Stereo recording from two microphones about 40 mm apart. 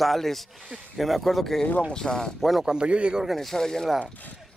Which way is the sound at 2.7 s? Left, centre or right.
Right.